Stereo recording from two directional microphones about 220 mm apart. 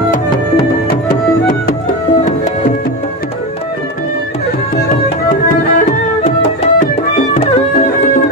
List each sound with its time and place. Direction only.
0.6 s music: 35° left (ahead or behind)
4.7 s tabla: 40° left (ahead or behind)
6.2 s music: 30° left (ahead or behind)